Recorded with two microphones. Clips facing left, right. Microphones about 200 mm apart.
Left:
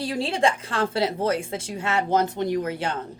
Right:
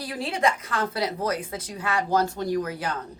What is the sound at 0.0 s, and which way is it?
A woman's voice, 30° left (ahead or behind).